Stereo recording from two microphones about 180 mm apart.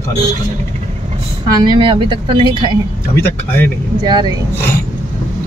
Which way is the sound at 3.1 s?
10° left (ahead or behind).